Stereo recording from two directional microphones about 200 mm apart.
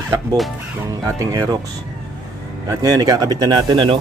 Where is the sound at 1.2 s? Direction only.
15° right (ahead or behind).